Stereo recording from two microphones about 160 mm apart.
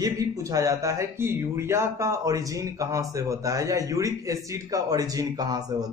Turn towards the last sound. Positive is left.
turn(degrees=-25)  # may be behind; listen again after turning